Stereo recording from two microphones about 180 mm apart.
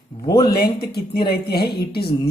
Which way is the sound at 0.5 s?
60° left (ahead or behind).